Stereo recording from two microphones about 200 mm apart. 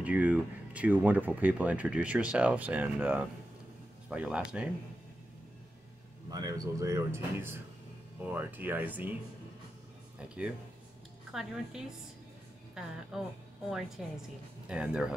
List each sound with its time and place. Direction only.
0.0 s speech: 10° right (ahead or behind)
6.3 s speech: 20° right (ahead or behind)
10.1 s speech: 5° right (ahead or behind)